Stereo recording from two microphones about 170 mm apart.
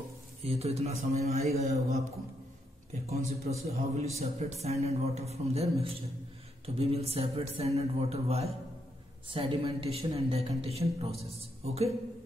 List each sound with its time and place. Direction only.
0.4 s speech: 35° right (ahead or behind)
2.9 s speech: 40° right (ahead or behind)